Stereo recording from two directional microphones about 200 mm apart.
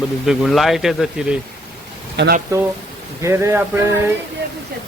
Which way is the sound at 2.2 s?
60° right (ahead or behind).